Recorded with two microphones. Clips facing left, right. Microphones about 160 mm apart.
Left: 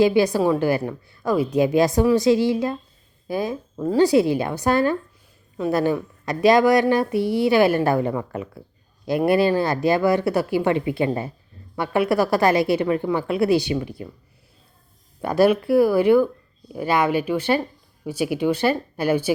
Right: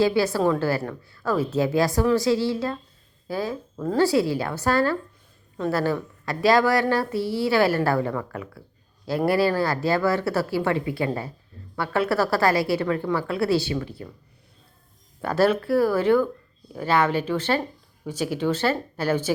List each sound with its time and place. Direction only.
0.0 s speech: 15° left (ahead or behind)
15.2 s speech: 15° left (ahead or behind)